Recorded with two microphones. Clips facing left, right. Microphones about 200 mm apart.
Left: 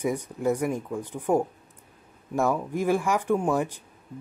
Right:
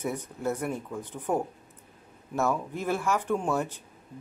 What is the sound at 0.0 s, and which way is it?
Speech, 15° left (ahead or behind).